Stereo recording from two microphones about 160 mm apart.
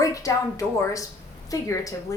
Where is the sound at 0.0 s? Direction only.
20° left (ahead or behind).